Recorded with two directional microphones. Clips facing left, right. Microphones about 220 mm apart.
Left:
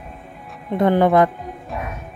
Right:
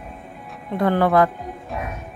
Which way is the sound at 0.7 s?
20° left (ahead or behind).